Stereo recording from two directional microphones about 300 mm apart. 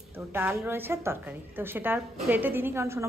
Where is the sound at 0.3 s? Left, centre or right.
Centre.